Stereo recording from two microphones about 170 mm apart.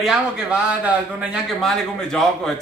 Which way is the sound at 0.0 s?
5° right (ahead or behind).